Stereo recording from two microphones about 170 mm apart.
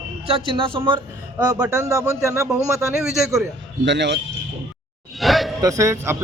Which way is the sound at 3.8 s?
90° right.